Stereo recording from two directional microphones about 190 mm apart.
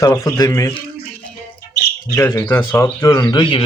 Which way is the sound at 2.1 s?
10° left (ahead or behind).